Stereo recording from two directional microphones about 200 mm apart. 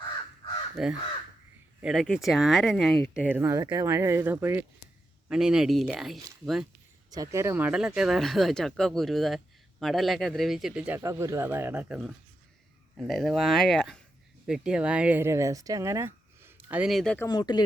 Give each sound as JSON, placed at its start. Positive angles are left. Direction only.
{"t": 0.8, "sound": "speech", "side_deg": 0}
{"t": 7.1, "sound": "speech", "side_deg": -15}
{"t": 17.2, "sound": "speech", "side_deg": 20}